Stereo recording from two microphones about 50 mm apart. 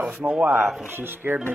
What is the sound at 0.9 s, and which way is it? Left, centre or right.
Speech, right.